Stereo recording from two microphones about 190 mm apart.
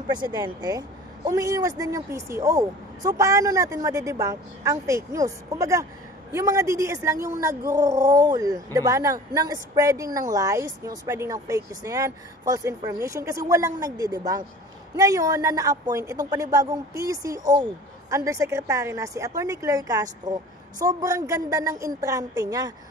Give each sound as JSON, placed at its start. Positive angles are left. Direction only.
{"t": 0.1, "sound": "speech", "side_deg": -25}